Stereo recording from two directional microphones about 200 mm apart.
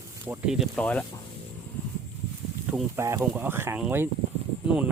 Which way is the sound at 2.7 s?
10° right (ahead or behind).